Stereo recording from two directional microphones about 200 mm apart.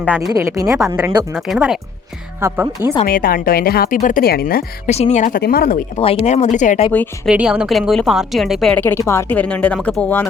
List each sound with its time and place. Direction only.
0.2 s a woman's voice: 15° right (ahead or behind)
1.3 s a woman's voice: centre (ahead or behind)
3.0 s a woman's voice: 45° left (ahead or behind)
4.9 s speech: 35° left (ahead or behind)
5.4 s a woman's voice: 50° left (ahead or behind)
6.0 s speech: 30° left (ahead or behind)
7.3 s a woman's voice: 5° right (ahead or behind)